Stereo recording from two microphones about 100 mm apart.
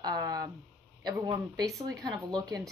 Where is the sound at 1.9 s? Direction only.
40° right (ahead or behind).